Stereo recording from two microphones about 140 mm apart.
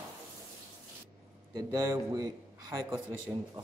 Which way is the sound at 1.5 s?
20° right (ahead or behind).